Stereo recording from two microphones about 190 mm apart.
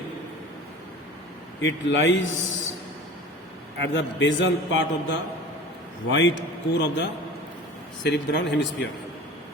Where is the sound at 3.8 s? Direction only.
75° left (ahead or behind).